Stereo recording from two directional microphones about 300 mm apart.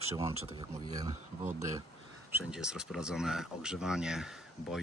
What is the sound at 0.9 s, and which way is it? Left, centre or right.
Speech, centre.